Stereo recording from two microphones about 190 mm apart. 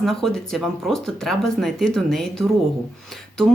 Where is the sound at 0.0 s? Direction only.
Centre (ahead or behind).